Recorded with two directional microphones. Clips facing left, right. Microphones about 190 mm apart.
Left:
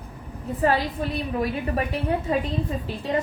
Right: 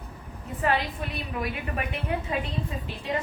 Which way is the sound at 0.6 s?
35° left (ahead or behind).